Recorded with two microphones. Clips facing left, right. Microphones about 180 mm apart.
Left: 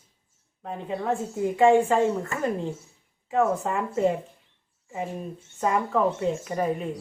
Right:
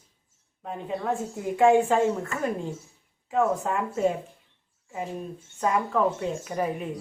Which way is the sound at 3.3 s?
Centre (ahead or behind).